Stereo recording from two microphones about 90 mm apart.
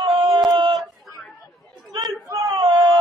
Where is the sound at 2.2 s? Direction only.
40° right (ahead or behind).